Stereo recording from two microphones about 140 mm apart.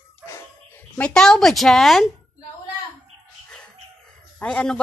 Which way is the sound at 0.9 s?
5° left (ahead or behind).